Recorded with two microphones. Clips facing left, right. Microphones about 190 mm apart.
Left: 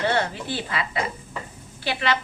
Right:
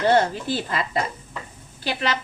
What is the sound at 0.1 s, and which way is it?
A woman's voice, 45° right (ahead or behind).